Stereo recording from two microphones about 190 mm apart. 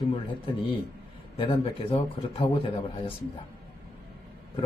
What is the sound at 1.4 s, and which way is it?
Speech, 30° left (ahead or behind).